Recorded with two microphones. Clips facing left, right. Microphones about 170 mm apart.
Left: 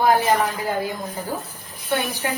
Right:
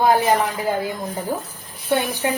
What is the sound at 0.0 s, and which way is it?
Speech, 20° right (ahead or behind).